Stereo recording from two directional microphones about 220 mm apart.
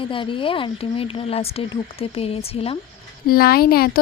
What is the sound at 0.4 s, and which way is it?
Speech, 25° left (ahead or behind).